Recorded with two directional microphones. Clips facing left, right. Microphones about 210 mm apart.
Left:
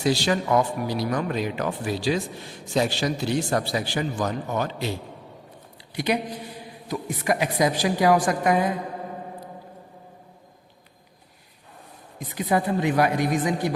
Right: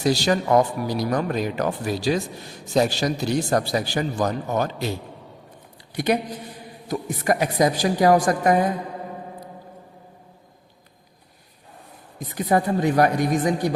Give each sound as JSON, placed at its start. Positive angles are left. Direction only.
{"t": 0.0, "sound": "speech", "side_deg": -40}
{"t": 5.9, "sound": "a woman's voice", "side_deg": -45}
{"t": 12.5, "sound": "a woman's voice", "side_deg": -45}